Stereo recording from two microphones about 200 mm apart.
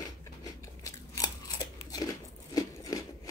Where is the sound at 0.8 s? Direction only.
20° left (ahead or behind).